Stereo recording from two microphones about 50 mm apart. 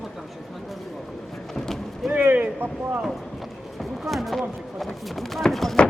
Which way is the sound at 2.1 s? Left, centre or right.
Right.